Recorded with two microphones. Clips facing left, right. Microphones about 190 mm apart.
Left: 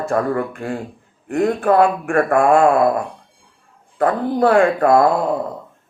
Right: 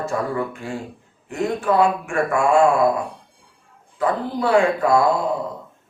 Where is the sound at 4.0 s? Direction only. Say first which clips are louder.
Left 5 dB; 55° left (ahead or behind).